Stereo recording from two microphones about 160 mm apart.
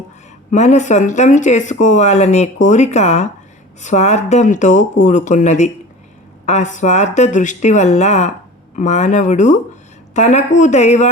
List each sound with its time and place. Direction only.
0.5 s speech: 45° left (ahead or behind)